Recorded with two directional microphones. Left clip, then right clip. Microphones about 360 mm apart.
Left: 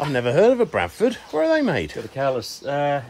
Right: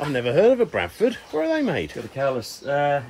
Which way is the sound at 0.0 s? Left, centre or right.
Centre.